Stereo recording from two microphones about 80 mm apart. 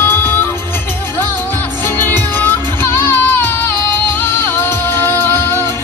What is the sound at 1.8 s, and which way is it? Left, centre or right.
Music, left.